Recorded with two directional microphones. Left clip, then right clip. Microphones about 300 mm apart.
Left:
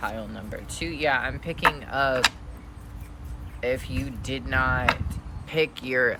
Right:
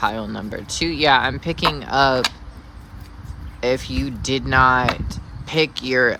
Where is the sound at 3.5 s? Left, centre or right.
Centre.